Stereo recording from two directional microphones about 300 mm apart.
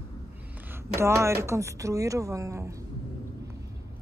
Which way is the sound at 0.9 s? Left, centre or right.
Centre.